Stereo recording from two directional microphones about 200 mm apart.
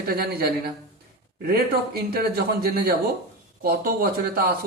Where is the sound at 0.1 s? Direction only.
50° right (ahead or behind).